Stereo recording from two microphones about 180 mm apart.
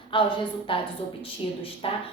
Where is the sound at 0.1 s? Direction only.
25° left (ahead or behind).